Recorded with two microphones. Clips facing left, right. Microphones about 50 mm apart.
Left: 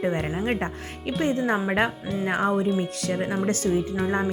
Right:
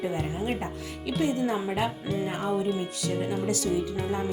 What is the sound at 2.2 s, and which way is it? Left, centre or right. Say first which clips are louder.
Speech: left 6 dB; left.